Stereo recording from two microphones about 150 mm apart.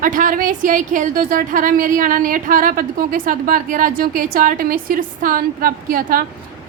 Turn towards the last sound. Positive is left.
turn(degrees=-70)  # may be behind; listen again after turning